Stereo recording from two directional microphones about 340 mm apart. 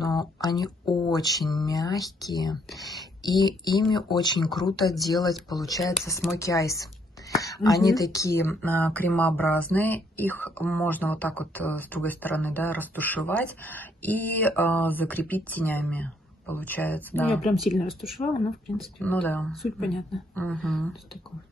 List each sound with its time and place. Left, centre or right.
0.0 s speech: centre
4.1 s speech: centre
4.8 s speech: centre
17.3 s speech: centre
17.6 s speech: centre